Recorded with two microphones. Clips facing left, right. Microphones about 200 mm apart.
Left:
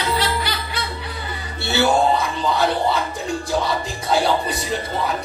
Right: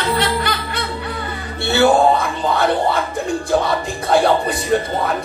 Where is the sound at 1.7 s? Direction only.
55° right (ahead or behind).